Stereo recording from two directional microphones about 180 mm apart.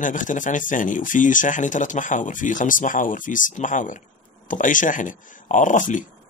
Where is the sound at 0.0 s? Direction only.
45° left (ahead or behind).